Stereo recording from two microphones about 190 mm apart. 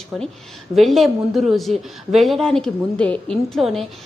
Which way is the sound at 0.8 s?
Centre (ahead or behind).